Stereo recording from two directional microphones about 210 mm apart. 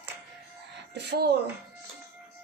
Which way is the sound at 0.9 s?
55° right (ahead or behind).